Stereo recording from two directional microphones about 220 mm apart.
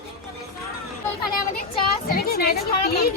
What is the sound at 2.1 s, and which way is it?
Speech, 45° left (ahead or behind).